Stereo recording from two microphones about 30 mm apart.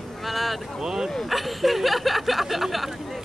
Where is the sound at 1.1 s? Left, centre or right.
Centre.